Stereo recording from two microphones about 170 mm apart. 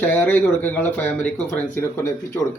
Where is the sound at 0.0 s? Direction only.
10° left (ahead or behind).